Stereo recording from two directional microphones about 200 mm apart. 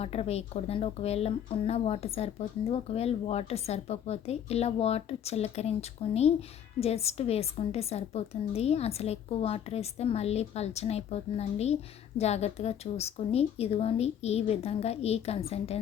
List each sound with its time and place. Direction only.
0.0 s a woman's voice: 30° left (ahead or behind)